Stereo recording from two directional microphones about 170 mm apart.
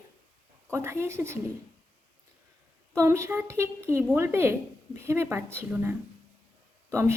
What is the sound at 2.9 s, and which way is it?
A woman's voice, 15° right (ahead or behind).